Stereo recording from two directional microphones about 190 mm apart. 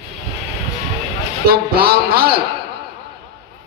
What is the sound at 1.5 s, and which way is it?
Speech, 55° right (ahead or behind).